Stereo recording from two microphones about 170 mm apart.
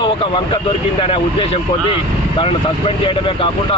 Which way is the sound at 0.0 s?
30° left (ahead or behind).